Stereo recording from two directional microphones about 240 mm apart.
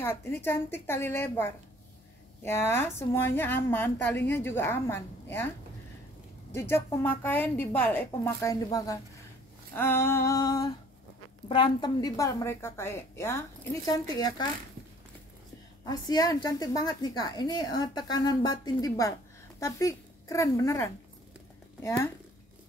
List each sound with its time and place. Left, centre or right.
0.0 s a woman's voice: centre
6.5 s a woman's voice: centre
15.8 s a woman's voice: centre